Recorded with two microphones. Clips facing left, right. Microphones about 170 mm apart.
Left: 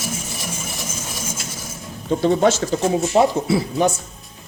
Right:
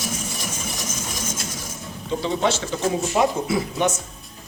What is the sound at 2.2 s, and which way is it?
Speech, 45° left (ahead or behind).